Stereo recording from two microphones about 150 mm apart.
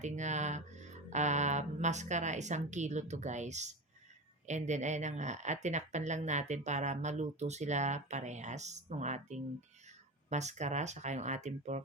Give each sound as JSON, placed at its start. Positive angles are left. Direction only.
{"t": 0.0, "sound": "speech", "side_deg": -50}